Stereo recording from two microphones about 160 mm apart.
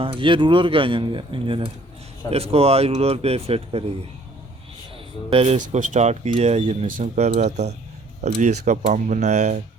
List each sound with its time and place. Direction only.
0.0 s speech: 35° right (ahead or behind)
5.3 s speech: 35° right (ahead or behind)
5.6 s speech: 50° right (ahead or behind)